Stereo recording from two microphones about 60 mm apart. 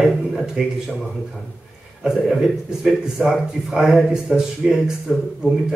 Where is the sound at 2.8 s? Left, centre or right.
Centre.